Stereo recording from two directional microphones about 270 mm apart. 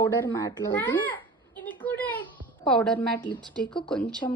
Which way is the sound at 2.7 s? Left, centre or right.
Centre.